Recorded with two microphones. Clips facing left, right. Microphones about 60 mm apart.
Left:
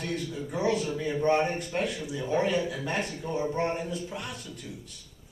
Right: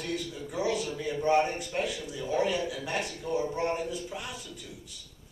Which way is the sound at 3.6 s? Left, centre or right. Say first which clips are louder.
Even; centre.